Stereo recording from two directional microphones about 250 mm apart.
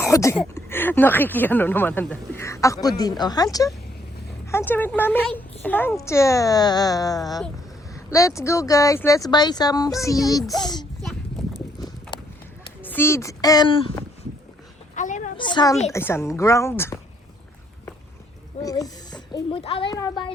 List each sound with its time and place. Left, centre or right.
0.0 s speech: centre
12.1 s run: centre
12.8 s speech: centre
14.9 s a sound: left
15.4 s a woman's voice: centre
18.6 s speech: centre